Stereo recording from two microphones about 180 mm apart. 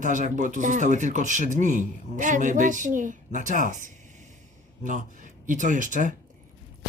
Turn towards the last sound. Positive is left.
turn(degrees=-45)  # may be behind; listen again after turning